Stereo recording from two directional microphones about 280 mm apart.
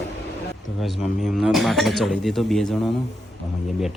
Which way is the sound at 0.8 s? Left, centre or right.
Centre.